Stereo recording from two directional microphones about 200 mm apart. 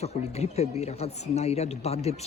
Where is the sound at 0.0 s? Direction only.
30° left (ahead or behind).